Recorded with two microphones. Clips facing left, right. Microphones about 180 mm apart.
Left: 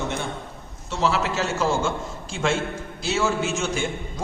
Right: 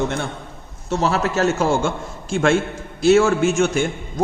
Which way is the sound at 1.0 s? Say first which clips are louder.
Right 4 dB; 45° right (ahead or behind).